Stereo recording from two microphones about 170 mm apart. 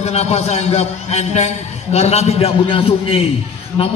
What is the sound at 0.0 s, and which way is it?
A man's voice, 40° left (ahead or behind).